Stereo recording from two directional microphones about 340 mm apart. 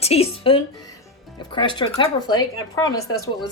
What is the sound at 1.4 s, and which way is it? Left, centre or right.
A woman's voice, centre.